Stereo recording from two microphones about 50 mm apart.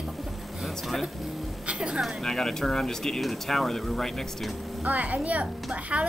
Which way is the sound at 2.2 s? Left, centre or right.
Centre.